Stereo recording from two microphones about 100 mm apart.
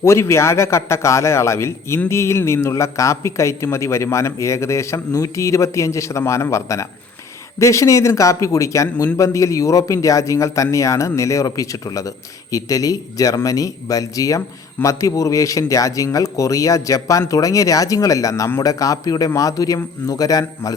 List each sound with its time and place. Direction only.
0.0 s a man's voice: 25° left (ahead or behind)